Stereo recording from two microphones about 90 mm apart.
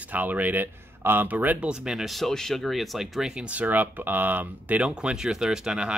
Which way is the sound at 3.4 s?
15° right (ahead or behind).